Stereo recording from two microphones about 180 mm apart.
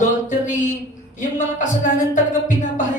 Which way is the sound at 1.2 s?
45° left (ahead or behind).